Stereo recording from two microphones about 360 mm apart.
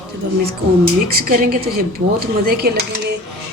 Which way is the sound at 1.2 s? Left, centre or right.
Right.